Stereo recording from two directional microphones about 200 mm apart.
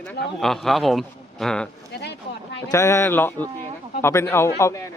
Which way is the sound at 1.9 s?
55° left (ahead or behind).